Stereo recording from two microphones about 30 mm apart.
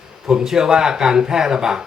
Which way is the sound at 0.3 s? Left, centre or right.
Right.